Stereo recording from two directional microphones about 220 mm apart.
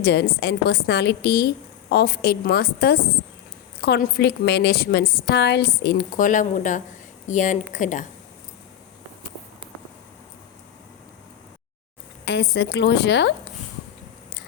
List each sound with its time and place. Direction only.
0.0 s a woman's voice: 50° left (ahead or behind)
12.2 s a woman's voice: 50° left (ahead or behind)